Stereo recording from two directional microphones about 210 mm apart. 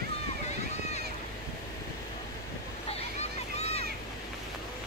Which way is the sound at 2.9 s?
30° left (ahead or behind).